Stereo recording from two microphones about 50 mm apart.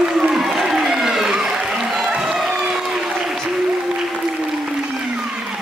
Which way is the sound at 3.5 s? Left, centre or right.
Centre.